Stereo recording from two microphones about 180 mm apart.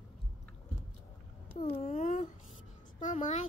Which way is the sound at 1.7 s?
40° left (ahead or behind).